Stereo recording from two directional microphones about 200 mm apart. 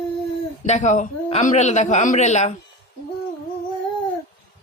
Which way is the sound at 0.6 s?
35° left (ahead or behind).